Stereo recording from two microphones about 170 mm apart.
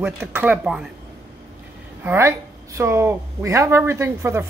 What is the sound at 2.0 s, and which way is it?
A woman's voice, 15° right (ahead or behind).